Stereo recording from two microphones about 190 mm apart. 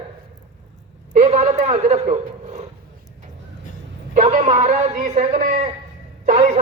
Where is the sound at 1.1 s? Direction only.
35° right (ahead or behind).